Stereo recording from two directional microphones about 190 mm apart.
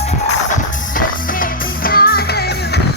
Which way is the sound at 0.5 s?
45° left (ahead or behind).